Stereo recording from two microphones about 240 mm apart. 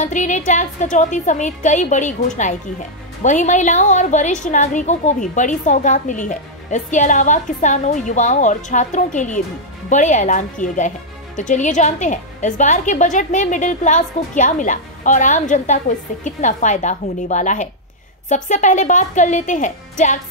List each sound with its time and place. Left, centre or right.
0.0 s a woman's voice: left